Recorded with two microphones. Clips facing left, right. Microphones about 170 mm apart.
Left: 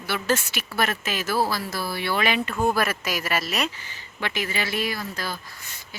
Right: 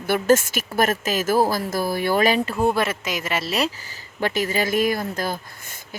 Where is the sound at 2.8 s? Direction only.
20° right (ahead or behind).